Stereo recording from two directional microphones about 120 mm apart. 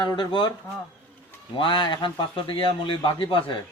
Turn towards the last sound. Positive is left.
turn(degrees=45)  # may be behind; listen again after turning